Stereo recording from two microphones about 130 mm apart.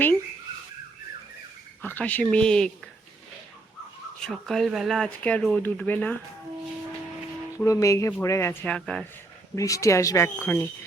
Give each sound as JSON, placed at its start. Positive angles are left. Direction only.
{"t": 1.8, "sound": "speech", "side_deg": 15}
{"t": 4.2, "sound": "speech", "side_deg": 5}
{"t": 7.6, "sound": "a woman's voice", "side_deg": 25}
{"t": 8.7, "sound": "speech", "side_deg": 5}
{"t": 9.6, "sound": "a woman's voice", "side_deg": 25}